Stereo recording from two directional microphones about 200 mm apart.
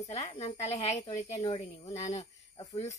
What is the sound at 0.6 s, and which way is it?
Speech, 30° left (ahead or behind).